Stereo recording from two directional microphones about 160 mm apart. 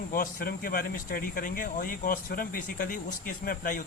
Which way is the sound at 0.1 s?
65° left (ahead or behind).